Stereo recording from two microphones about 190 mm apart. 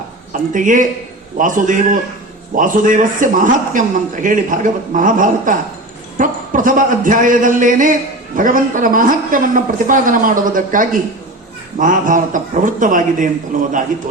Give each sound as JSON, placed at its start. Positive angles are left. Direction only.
{"t": 0.5, "sound": "a man's voice", "side_deg": -45}